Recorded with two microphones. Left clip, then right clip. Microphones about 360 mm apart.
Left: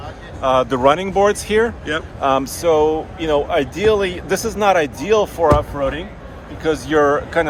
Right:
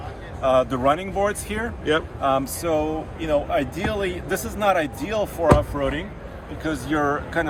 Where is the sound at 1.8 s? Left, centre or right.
Centre.